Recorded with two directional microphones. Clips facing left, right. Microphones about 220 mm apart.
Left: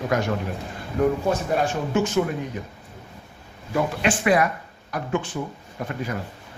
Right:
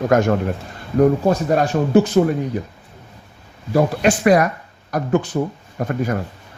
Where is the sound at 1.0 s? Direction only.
35° right (ahead or behind).